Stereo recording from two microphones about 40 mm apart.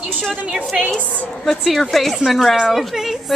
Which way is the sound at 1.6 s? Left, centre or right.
Centre.